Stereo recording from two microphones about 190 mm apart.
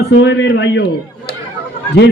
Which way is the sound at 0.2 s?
70° left (ahead or behind).